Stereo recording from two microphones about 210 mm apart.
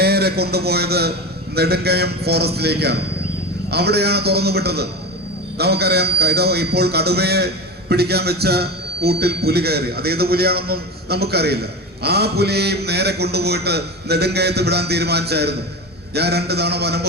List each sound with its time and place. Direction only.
0.0 s a man's voice: 50° right (ahead or behind)